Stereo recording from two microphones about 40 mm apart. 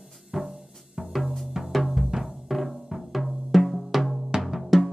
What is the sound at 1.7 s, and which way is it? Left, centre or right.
Music, centre.